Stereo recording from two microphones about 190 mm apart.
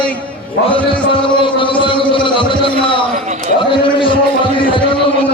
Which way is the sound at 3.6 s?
25° left (ahead or behind).